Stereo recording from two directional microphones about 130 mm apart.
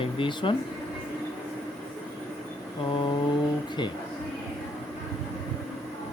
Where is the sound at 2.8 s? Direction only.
40° left (ahead or behind).